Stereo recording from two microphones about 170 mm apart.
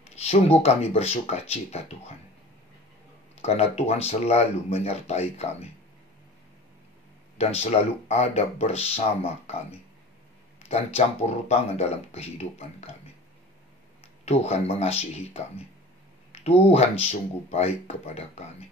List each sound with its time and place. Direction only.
0.0 s speech: 40° left (ahead or behind)
3.3 s speech: 35° left (ahead or behind)
7.3 s speech: 40° left (ahead or behind)
14.2 s speech: 40° left (ahead or behind)